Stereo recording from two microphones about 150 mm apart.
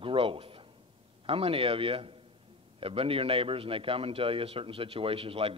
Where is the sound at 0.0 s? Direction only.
35° right (ahead or behind).